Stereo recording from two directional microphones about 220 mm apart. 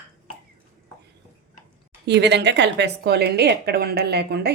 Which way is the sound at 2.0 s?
50° right (ahead or behind).